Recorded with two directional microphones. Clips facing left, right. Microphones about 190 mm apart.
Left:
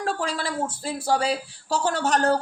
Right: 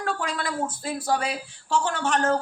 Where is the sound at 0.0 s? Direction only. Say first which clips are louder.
Left 1 dB; 30° left (ahead or behind).